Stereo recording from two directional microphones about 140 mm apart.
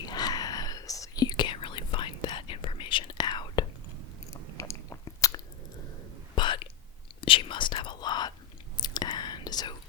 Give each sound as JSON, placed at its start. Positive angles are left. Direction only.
{"t": 0.0, "sound": "whispering", "side_deg": 30}
{"t": 4.5, "sound": "biting", "side_deg": 20}
{"t": 6.3, "sound": "whispering", "side_deg": 35}